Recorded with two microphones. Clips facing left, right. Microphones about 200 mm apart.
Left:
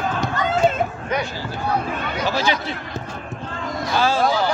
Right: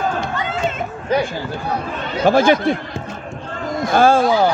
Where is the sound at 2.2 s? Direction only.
50° right (ahead or behind).